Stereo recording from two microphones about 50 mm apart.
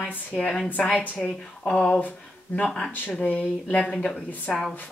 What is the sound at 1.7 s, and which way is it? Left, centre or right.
Speech, centre.